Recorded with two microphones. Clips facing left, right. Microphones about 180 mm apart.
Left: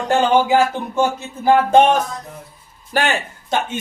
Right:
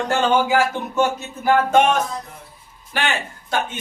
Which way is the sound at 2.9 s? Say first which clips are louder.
Left 5 dB; 40° left (ahead or behind).